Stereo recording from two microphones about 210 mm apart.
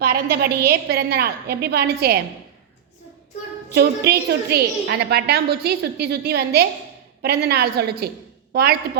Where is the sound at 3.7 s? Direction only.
50° right (ahead or behind).